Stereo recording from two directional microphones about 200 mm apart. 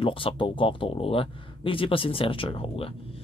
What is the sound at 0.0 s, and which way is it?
Speech, 25° left (ahead or behind).